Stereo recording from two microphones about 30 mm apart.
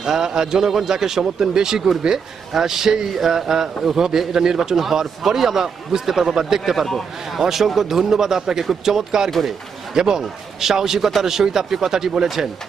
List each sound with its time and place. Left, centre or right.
0.0 s a man's voice: centre